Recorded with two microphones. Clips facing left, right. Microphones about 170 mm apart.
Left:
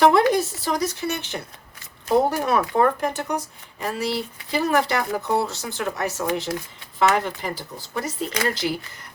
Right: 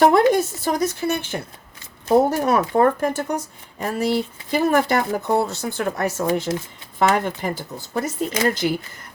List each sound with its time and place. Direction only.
0.0 s speech: 50° right (ahead or behind)
2.0 s speech: 40° right (ahead or behind)
6.5 s speech: 20° right (ahead or behind)
7.1 s speech: 50° right (ahead or behind)